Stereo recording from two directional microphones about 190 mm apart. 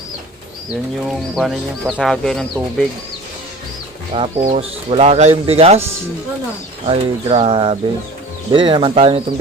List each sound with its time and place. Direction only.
0.7 s speech: centre (ahead or behind)
4.1 s speech: 30° right (ahead or behind)
6.8 s speech: 30° right (ahead or behind)